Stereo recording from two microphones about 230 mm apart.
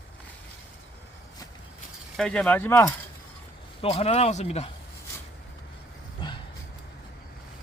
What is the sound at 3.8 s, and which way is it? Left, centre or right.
Speech, left.